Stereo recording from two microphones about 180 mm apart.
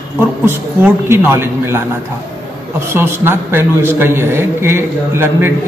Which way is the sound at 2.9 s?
15° right (ahead or behind).